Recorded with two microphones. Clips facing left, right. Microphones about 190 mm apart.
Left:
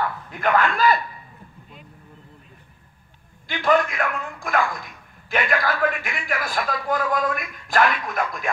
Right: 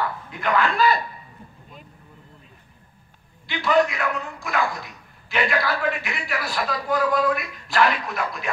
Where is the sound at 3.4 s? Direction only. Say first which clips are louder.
Even; 50° left (ahead or behind).